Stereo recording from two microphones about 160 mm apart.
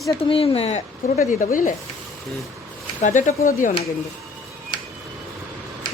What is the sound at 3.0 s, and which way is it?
Speech, 50° left (ahead or behind).